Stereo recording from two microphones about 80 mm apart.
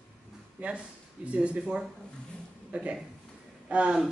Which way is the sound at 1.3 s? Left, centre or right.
Centre.